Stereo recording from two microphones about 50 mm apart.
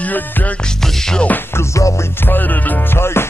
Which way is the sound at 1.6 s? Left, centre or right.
Left.